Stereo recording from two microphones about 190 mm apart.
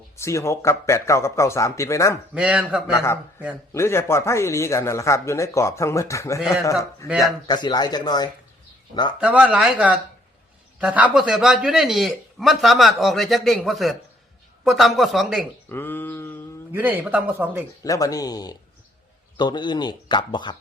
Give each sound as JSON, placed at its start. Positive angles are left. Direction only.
{"t": 0.2, "sound": "speech", "side_deg": 15}
{"t": 2.3, "sound": "a man's voice", "side_deg": -5}
{"t": 2.9, "sound": "speech", "side_deg": 15}
{"t": 7.4, "sound": "speech", "side_deg": 25}
{"t": 9.2, "sound": "a man's voice", "side_deg": -5}
{"t": 15.7, "sound": "a sound", "side_deg": 10}
{"t": 16.7, "sound": "speech", "side_deg": -10}
{"t": 17.8, "sound": "speech", "side_deg": 20}